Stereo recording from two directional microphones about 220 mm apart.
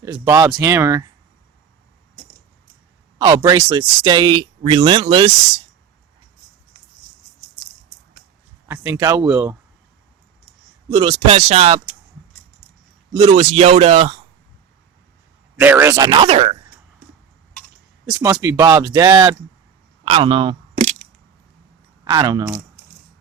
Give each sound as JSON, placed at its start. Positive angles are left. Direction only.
{"t": 0.0, "sound": "speech", "side_deg": -15}
{"t": 3.2, "sound": "speech", "side_deg": -15}
{"t": 8.6, "sound": "speech", "side_deg": -10}
{"t": 10.8, "sound": "speech", "side_deg": -15}
{"t": 13.2, "sound": "speech", "side_deg": -30}
{"t": 15.5, "sound": "speech", "side_deg": -10}
{"t": 18.2, "sound": "speech", "side_deg": -10}
{"t": 20.1, "sound": "a sound", "side_deg": -25}
{"t": 22.0, "sound": "speech", "side_deg": -20}